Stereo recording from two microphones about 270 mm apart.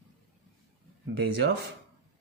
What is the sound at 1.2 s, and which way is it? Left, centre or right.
Speech, right.